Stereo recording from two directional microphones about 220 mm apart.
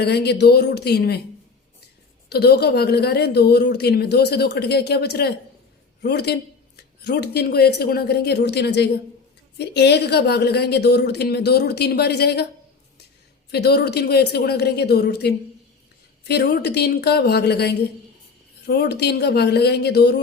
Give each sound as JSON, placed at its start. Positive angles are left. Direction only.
{"t": 0.0, "sound": "a woman's voice", "side_deg": 50}
{"t": 2.3, "sound": "a woman's voice", "side_deg": 45}
{"t": 13.5, "sound": "a woman's voice", "side_deg": 45}